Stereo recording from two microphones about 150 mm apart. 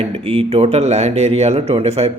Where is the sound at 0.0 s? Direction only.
45° right (ahead or behind).